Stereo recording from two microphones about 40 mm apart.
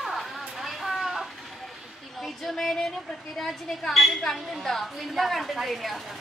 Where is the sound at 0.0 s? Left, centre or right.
Centre.